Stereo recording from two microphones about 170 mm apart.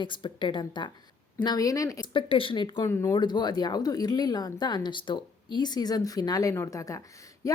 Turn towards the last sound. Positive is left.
turn(degrees=20)  # may be behind; listen again after turning